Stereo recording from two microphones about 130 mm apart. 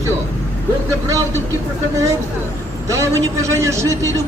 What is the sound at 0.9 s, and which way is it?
Speech, 25° right (ahead or behind).